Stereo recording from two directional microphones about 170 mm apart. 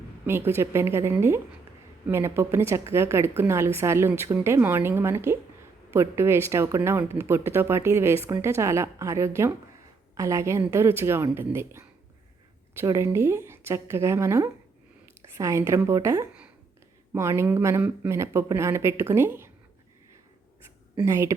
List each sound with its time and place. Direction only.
0.3 s a woman's voice: 15° right (ahead or behind)
20.9 s speech: 15° right (ahead or behind)